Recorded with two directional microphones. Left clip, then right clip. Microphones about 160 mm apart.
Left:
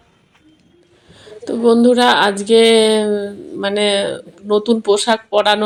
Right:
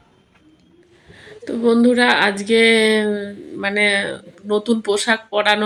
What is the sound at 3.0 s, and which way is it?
Speech, 25° right (ahead or behind).